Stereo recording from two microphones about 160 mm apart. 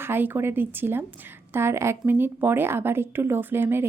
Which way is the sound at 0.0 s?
15° right (ahead or behind).